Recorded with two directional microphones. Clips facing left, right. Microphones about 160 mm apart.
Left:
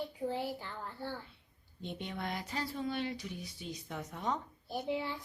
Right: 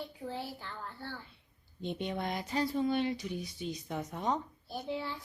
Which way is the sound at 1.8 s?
20° right (ahead or behind).